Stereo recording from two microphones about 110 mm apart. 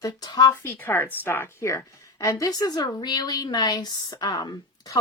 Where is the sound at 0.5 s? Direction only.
20° left (ahead or behind).